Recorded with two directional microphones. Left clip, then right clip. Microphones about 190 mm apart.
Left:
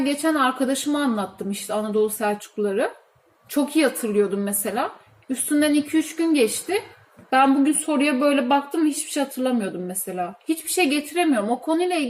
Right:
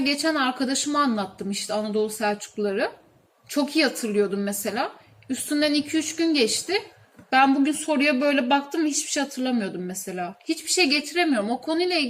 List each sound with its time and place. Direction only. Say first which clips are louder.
0.0 s a woman's voice: left 2 dB; 5° right (ahead or behind)